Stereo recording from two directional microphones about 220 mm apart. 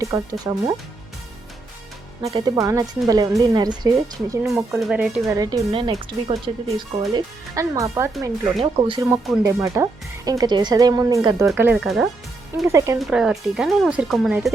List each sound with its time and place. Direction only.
0.0 s speech: 15° right (ahead or behind)
2.2 s speech: 15° right (ahead or behind)
4.8 s speech: centre (ahead or behind)
5.3 s speech: 15° right (ahead or behind); by 12.0 s centre (ahead or behind)
12.6 s speech: 15° right (ahead or behind)
13.0 s speech: 5° right (ahead or behind)